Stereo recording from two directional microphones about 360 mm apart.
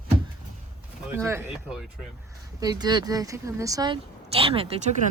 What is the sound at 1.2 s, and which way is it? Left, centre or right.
A woman's voice, centre.